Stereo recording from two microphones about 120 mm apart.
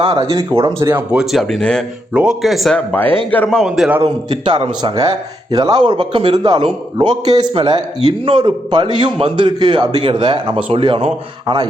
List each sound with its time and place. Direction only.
0.0 s speech: 40° right (ahead or behind)
0.3 s speech: 30° right (ahead or behind)
1.1 s speech: centre (ahead or behind)
2.7 s speech: 15° left (ahead or behind)
3.6 s speech: 5° right (ahead or behind)
4.0 s a man's voice: 45° right (ahead or behind)